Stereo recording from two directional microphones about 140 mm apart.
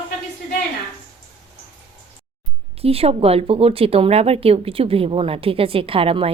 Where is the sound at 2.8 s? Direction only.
45° right (ahead or behind).